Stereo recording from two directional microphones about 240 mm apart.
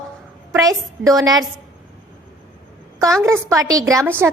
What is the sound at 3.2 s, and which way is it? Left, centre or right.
A woman's voice, centre.